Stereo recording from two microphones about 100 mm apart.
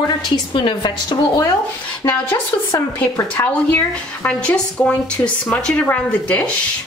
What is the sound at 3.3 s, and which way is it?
Speech, 20° left (ahead or behind).